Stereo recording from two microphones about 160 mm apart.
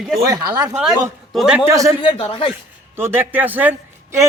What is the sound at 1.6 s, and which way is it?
Speech, 20° right (ahead or behind).